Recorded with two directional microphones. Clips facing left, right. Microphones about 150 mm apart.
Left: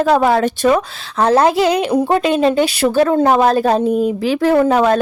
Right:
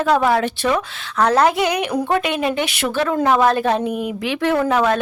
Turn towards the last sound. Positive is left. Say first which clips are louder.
# left 5 dB
turn(degrees=40)  # may be behind; listen again after turning